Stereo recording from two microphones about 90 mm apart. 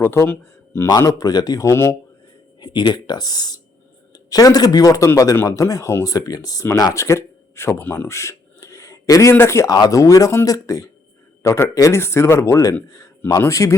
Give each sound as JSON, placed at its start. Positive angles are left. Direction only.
{"t": 0.0, "sound": "a man's voice", "side_deg": 25}
{"t": 0.9, "sound": "speech", "side_deg": 45}
{"t": 2.6, "sound": "a man's voice", "side_deg": 55}
{"t": 9.7, "sound": "a man's voice", "side_deg": 50}
{"t": 10.0, "sound": "speech", "side_deg": 35}
{"t": 11.4, "sound": "a man's voice", "side_deg": 30}